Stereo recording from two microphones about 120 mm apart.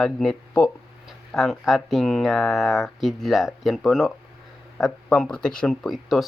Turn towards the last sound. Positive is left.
turn(degrees=0)  # may be behind; listen again after turning